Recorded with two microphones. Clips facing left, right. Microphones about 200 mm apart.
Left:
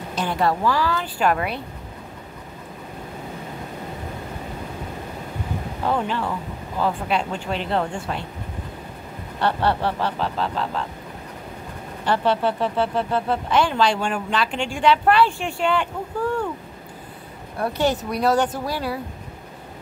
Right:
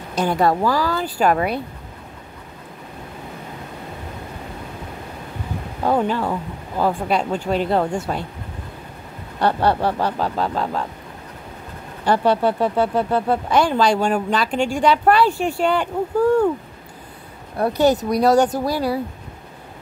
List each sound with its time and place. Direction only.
0.1 s speech: 45° right (ahead or behind)
5.9 s speech: 40° right (ahead or behind)
9.4 s speech: 45° right (ahead or behind)
12.1 s speech: 40° right (ahead or behind)
17.6 s speech: 40° right (ahead or behind)